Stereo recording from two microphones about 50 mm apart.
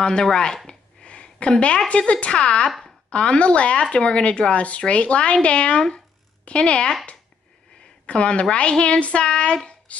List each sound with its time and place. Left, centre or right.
0.0 s speech: centre
0.7 s a sound: centre
1.9 s speech: left
8.1 s speech: left
9.9 s music: left